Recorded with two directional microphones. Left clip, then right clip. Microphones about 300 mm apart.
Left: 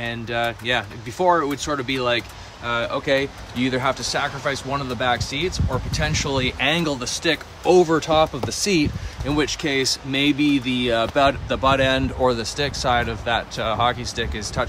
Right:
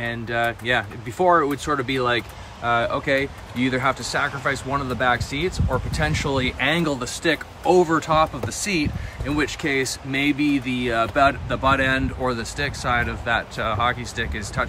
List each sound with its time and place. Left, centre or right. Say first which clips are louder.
0.0 s speech: right 1 dB; centre